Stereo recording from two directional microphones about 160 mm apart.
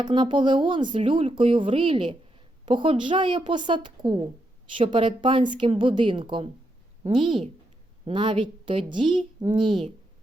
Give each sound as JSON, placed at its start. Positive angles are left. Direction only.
{"t": 0.0, "sound": "a woman's voice", "side_deg": -30}